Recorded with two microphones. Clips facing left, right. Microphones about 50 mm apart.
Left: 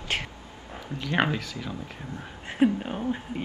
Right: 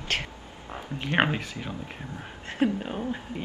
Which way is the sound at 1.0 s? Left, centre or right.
Right.